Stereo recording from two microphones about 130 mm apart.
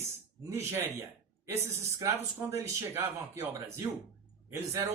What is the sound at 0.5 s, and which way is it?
Speech, 20° right (ahead or behind).